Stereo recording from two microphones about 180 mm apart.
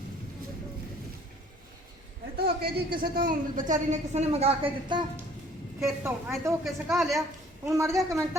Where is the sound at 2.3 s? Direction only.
60° right (ahead or behind); by 5.0 s 30° right (ahead or behind).